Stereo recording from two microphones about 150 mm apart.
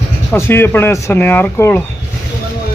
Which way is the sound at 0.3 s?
15° left (ahead or behind).